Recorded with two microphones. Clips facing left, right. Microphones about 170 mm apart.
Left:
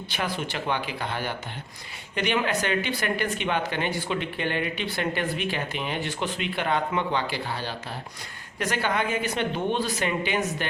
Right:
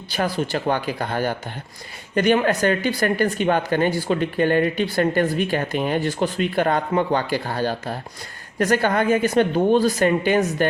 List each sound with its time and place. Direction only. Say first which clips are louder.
0.1 s speech: right 8 dB; 40° right (ahead or behind)